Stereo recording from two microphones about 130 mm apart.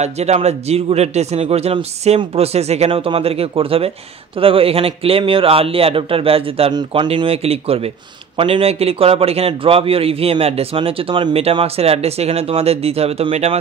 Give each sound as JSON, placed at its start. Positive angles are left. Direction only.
{"t": 0.0, "sound": "a man's voice", "side_deg": -55}